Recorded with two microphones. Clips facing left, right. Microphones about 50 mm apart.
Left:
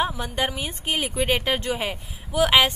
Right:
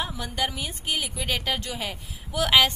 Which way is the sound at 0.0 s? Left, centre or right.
Left.